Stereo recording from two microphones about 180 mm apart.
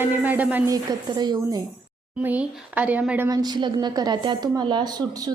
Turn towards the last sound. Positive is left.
turn(degrees=-20)  # may be behind; listen again after turning